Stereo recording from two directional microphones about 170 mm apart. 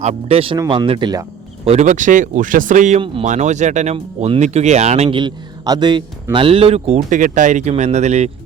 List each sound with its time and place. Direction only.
0.0 s speech: 35° right (ahead or behind)
1.6 s speech: 40° right (ahead or behind)